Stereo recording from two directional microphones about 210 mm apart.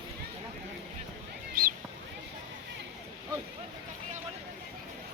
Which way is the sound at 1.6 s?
45° right (ahead or behind).